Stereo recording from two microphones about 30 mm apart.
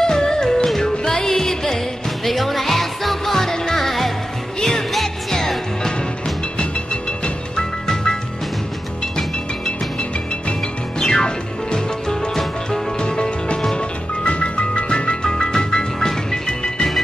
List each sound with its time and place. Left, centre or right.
0.0 s music: left
2.2 s music: centre
4.6 s music: left
7.8 s music: left
11.0 s music: left